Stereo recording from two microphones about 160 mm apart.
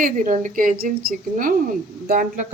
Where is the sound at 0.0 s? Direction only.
55° right (ahead or behind).